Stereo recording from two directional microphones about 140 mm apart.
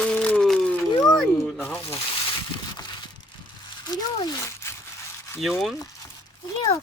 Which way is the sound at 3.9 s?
25° left (ahead or behind).